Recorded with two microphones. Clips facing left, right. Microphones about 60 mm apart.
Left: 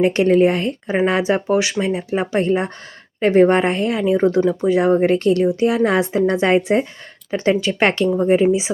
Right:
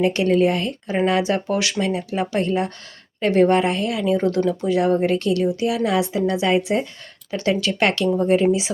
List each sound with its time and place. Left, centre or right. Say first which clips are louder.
0.0 s a woman's voice: left 4 dB; left